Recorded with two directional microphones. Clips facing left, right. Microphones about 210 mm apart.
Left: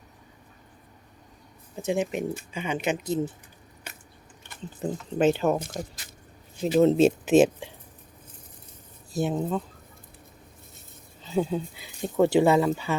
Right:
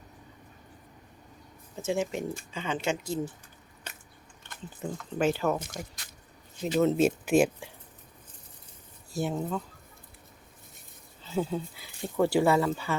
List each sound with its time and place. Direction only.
1.7 s speech: 15° left (ahead or behind)
4.8 s speech: 25° left (ahead or behind)
6.7 s speech: 30° left (ahead or behind)
9.1 s speech: 20° left (ahead or behind)
11.2 s speech: 20° left (ahead or behind)